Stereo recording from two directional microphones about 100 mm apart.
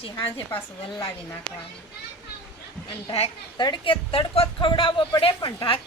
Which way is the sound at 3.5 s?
50° left (ahead or behind).